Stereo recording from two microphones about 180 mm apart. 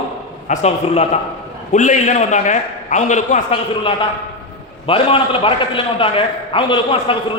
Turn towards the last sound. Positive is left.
turn(degrees=30)  # may be behind; listen again after turning